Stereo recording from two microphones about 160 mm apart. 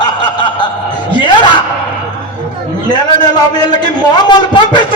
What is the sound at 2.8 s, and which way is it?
A man's voice, 25° left (ahead or behind).